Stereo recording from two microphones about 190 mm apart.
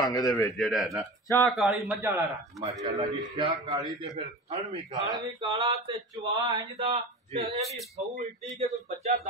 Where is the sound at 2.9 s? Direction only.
35° right (ahead or behind).